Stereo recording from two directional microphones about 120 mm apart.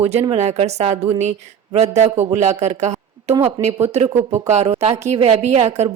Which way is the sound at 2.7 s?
75° right (ahead or behind).